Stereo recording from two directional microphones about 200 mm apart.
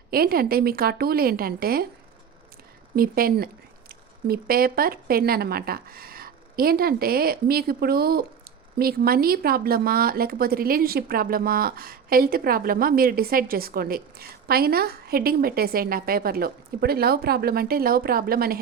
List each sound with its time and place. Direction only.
0.1 s speech: 50° right (ahead or behind)
2.9 s speech: 45° right (ahead or behind)